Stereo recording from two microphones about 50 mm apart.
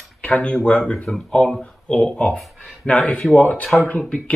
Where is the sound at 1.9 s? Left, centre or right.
Left.